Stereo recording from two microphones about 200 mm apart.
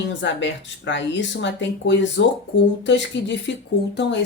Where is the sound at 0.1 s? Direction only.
65° left (ahead or behind).